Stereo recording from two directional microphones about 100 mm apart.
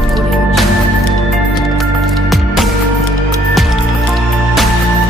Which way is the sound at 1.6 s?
Centre (ahead or behind).